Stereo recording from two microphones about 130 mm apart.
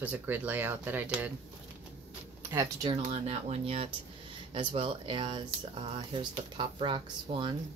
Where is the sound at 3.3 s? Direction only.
55° right (ahead or behind).